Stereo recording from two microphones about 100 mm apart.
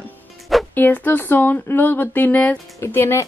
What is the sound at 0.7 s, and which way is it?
Speech, 20° left (ahead or behind).